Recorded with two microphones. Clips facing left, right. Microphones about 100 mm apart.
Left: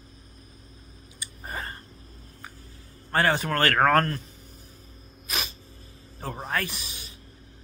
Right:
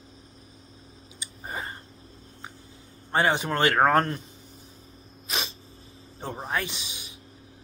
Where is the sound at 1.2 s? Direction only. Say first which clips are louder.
Even; 20° right (ahead or behind).